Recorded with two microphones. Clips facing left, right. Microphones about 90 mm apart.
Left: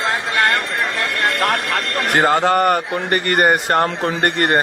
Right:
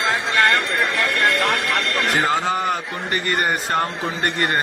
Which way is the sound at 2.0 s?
60° left (ahead or behind).